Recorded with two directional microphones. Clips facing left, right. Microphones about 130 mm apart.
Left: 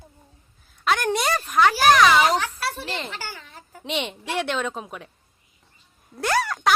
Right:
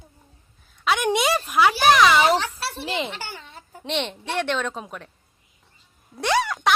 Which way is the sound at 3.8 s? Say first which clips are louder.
Right 1 dB; 5° left (ahead or behind).